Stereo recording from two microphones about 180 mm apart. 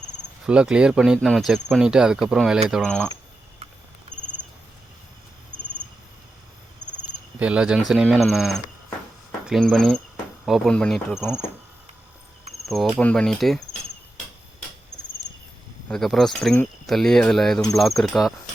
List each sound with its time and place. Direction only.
0.4 s speech: 5° right (ahead or behind)
4.1 s cricket: 45° left (ahead or behind)
7.3 s speech: 5° right (ahead or behind)
12.6 s cricket: centre (ahead or behind)
13.0 s speech: 5° left (ahead or behind)
15.9 s speech: centre (ahead or behind)